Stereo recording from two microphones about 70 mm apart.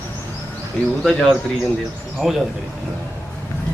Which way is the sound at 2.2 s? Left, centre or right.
Centre.